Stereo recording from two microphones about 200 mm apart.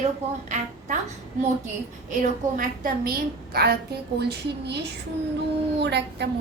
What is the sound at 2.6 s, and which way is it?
A woman's voice, 45° right (ahead or behind).